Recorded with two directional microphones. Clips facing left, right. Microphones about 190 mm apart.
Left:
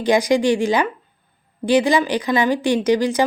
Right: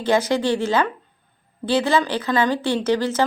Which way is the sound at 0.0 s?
15° left (ahead or behind).